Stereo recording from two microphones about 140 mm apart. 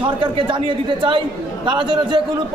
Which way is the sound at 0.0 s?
35° right (ahead or behind).